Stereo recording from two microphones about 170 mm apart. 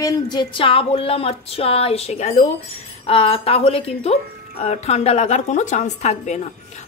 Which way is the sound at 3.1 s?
35° left (ahead or behind).